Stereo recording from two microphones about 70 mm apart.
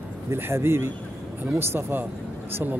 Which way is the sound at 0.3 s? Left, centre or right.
Right.